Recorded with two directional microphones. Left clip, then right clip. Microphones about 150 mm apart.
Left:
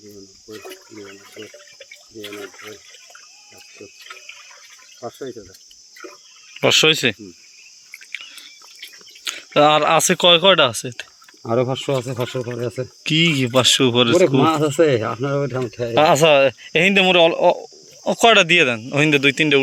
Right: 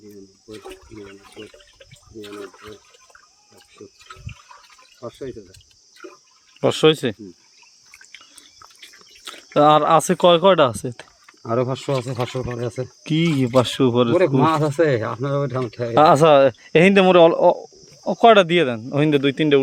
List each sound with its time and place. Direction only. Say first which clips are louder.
0.5 s a sound: left 2 dB; 35° right (ahead or behind)
2.4 s a sound: left 2 dB; 25° right (ahead or behind)
6.6 s speech: left 2 dB; 15° right (ahead or behind)
9.2 s a sound: left 1 dB; 20° right (ahead or behind)
10.1 s speech: left 1 dB; 25° right (ahead or behind)
11.4 s speech: left 2 dB; 25° left (ahead or behind)
11.9 s speech: left 1 dB; 15° left (ahead or behind)
13.1 s speech: left 4 dB; 20° right (ahead or behind)
14.6 s speech: left 2 dB; 5° left (ahead or behind)
16.0 s speech: right 1 dB; 35° right (ahead or behind)
17.6 s speech: left 3 dB; 10° right (ahead or behind)